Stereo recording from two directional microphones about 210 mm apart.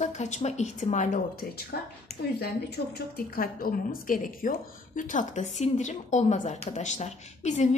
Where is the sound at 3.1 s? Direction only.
45° left (ahead or behind).